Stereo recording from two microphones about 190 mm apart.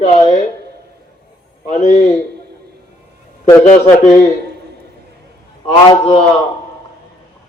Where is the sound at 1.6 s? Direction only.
35° left (ahead or behind).